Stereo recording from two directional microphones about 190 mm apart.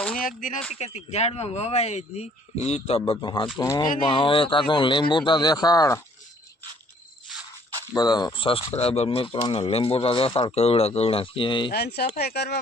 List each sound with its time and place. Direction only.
0.1 s a sound: 45° left (ahead or behind)
0.8 s a man's voice: 35° left (ahead or behind); by 3.8 s 15° left (ahead or behind)
4.1 s speech: 25° left (ahead or behind)
7.9 s speech: 20° left (ahead or behind)
11.7 s speech: 55° left (ahead or behind)